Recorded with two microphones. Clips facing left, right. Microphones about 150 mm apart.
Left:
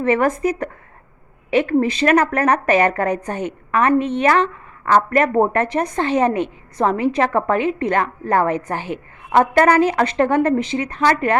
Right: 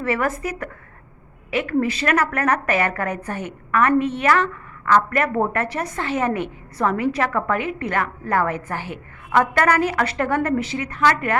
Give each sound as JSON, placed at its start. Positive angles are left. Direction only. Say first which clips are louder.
{"t": 0.0, "sound": "a woman's voice", "louder": "left 6 dB", "side_deg": 30}
{"t": 1.7, "sound": "a woman's voice", "louder": "left 3 dB", "side_deg": 30}
{"t": 3.3, "sound": "a woman's voice", "louder": "left 2 dB", "side_deg": 20}